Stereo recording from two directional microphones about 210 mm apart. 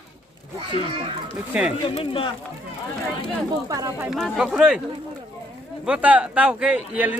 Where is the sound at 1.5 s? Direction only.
5° right (ahead or behind).